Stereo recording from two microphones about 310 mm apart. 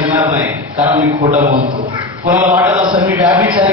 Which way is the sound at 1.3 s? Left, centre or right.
Right.